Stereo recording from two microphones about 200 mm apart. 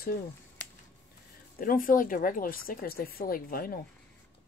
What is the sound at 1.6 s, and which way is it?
Speech, 45° left (ahead or behind).